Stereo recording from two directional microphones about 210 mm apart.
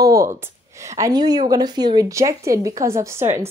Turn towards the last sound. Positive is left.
turn(degrees=-15)  # may be behind; listen again after turning